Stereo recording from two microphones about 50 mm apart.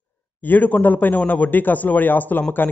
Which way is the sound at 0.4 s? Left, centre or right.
Left.